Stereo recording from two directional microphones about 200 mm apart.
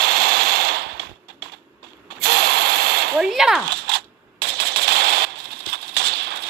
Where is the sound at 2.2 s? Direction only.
55° right (ahead or behind).